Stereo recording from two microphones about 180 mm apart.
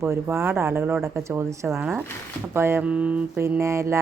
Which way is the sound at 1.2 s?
15° right (ahead or behind).